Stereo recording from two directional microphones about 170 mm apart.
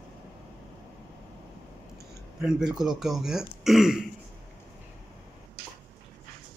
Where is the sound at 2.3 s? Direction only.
5° right (ahead or behind).